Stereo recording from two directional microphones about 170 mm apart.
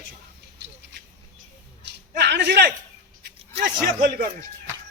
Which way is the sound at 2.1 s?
80° right.